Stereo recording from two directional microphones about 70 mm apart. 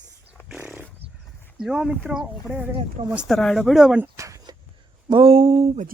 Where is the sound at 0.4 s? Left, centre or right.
Centre.